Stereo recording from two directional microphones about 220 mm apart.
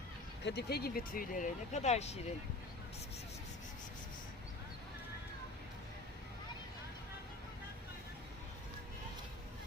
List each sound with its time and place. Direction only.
0.4 s speech: 50° left (ahead or behind); by 2.1 s 30° left (ahead or behind)